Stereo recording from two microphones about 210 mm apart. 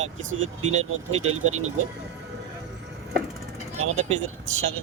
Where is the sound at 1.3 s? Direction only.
85° right.